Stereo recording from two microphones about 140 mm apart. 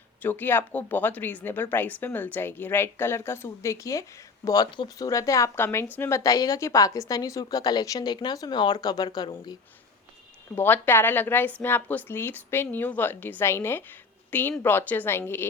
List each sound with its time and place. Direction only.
0.2 s a woman's voice: 15° left (ahead or behind); by 9.6 s 30° left (ahead or behind)
10.5 s a woman's voice: 15° left (ahead or behind)